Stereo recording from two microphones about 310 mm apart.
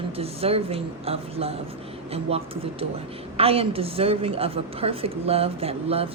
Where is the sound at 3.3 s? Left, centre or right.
Centre.